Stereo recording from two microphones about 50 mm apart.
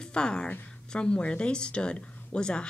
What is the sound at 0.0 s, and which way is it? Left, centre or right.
A woman's voice, centre.